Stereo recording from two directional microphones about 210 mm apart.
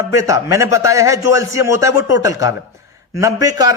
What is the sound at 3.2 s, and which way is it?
Speech, 15° right (ahead or behind).